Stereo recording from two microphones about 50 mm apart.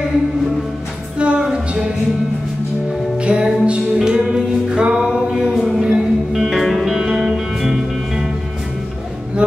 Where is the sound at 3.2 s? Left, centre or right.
Right.